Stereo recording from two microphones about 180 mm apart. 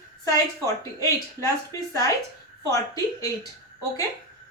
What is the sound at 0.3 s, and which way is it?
A woman's voice, 20° left (ahead or behind).